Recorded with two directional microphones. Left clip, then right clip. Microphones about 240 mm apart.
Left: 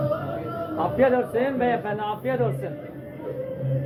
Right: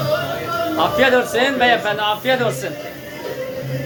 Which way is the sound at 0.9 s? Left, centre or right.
Centre.